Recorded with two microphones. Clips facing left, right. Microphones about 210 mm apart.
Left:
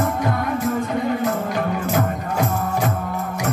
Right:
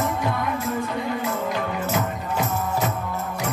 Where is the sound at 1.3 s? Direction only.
50° left (ahead or behind).